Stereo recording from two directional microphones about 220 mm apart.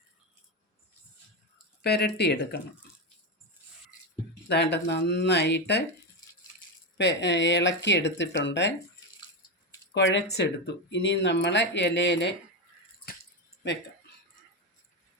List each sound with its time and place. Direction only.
1.8 s speech: 45° left (ahead or behind)
4.4 s speech: 50° left (ahead or behind)
6.9 s speech: 50° left (ahead or behind)
9.9 s speech: 55° left (ahead or behind)